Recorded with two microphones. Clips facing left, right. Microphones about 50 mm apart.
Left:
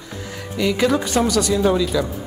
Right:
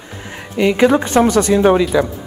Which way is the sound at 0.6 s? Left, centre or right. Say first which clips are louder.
Right 6 dB; right.